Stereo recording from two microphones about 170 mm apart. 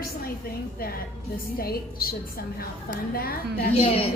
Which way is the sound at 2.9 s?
60° left (ahead or behind).